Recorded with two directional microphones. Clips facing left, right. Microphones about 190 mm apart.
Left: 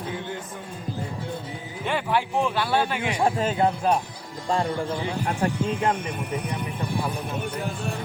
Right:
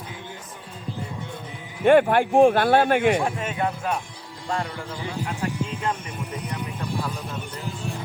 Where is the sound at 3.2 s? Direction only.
35° left (ahead or behind).